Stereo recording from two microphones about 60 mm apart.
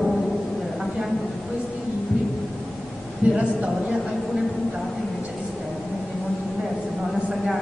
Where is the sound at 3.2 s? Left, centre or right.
Right.